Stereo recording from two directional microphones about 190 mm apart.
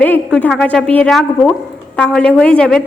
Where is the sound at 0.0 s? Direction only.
5° left (ahead or behind).